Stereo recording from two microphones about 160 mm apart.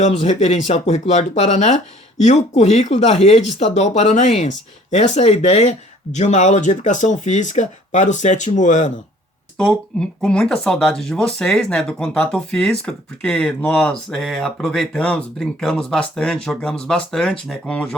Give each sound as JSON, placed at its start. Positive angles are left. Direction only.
{"t": 0.0, "sound": "speech", "side_deg": 45}
{"t": 9.6, "sound": "speech", "side_deg": 5}